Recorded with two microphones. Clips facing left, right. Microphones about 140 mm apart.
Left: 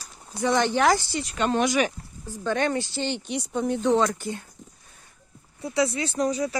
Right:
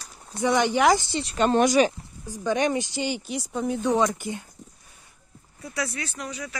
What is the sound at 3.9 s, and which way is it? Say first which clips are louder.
Speech: left 1 dB; 15° right (ahead or behind).